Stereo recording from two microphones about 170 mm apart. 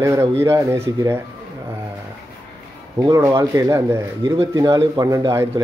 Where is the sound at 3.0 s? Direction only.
20° right (ahead or behind).